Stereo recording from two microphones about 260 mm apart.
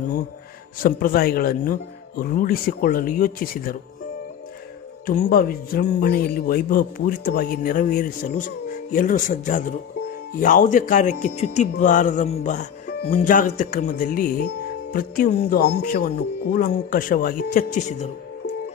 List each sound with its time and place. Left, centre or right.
0.7 s speech: left
5.0 s speech: left